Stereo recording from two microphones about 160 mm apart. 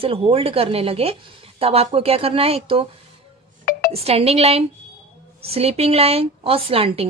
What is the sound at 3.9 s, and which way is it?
A woman's voice, 40° right (ahead or behind).